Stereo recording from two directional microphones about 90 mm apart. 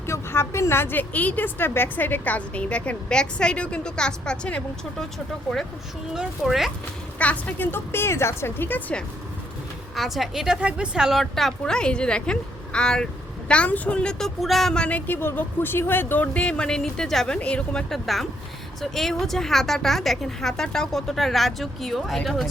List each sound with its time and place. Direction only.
0.1 s a woman's voice: 30° left (ahead or behind); by 5.0 s 10° left (ahead or behind)
6.1 s speech: 5° right (ahead or behind)
7.2 s a woman's voice: 15° left (ahead or behind)
9.9 s a woman's voice: centre (ahead or behind)